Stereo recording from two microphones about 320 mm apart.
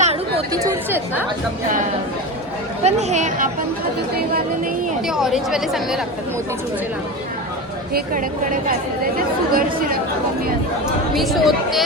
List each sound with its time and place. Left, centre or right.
0.0 s chatter: centre
0.9 s speech: centre
2.8 s speech: right
5.0 s speech: centre
7.9 s speech: right
11.1 s speech: centre